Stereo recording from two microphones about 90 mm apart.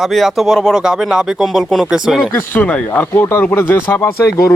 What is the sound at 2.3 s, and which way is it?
Speech, 20° left (ahead or behind).